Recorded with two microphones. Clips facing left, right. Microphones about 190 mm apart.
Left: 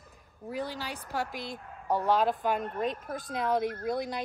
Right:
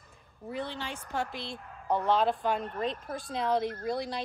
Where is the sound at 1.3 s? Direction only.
45° left (ahead or behind).